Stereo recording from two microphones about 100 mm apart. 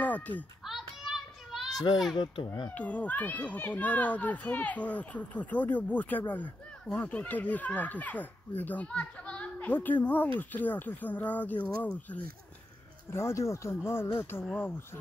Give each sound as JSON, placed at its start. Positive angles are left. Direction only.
{"t": 0.0, "sound": "children playing", "side_deg": 15}
{"t": 0.7, "sound": "child singing", "side_deg": -5}
{"t": 2.1, "sound": "speech", "side_deg": 55}
{"t": 2.7, "sound": "a child's voice", "side_deg": 15}
{"t": 13.1, "sound": "speech", "side_deg": 25}